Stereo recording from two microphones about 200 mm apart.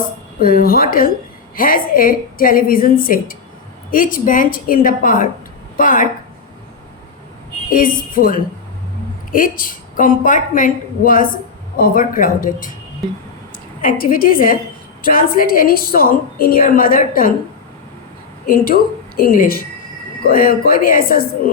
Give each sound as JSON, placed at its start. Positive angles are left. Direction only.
{"t": 0.3, "sound": "a woman's voice", "side_deg": 45}
{"t": 7.7, "sound": "a woman's voice", "side_deg": 45}
{"t": 13.8, "sound": "a woman's voice", "side_deg": 45}
{"t": 18.4, "sound": "a woman's voice", "side_deg": 45}